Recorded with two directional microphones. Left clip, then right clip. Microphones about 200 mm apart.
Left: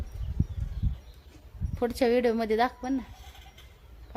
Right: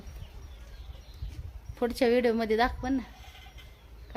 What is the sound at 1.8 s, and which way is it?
A woman's voice, 10° left (ahead or behind).